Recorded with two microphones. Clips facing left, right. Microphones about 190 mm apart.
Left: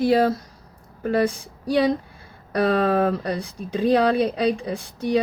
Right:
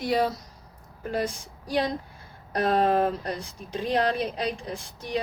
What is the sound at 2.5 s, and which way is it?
Speech, 70° left (ahead or behind).